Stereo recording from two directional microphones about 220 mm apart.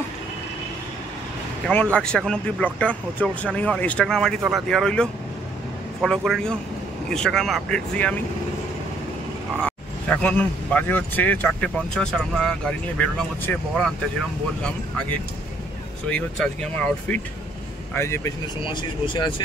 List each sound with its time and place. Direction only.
2.0 s speech: 5° left (ahead or behind)
9.6 s speech: 5° left (ahead or behind)
17.1 s speech: 5° left (ahead or behind)